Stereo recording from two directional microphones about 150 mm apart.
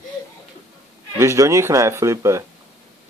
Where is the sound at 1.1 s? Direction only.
20° right (ahead or behind).